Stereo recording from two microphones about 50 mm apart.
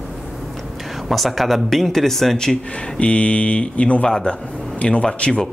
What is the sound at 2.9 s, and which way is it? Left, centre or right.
Speech, left.